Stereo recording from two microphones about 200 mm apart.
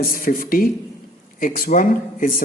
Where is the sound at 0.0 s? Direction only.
45° left (ahead or behind).